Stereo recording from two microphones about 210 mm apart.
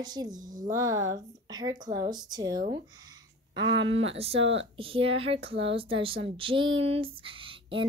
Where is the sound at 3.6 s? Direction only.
60° right (ahead or behind).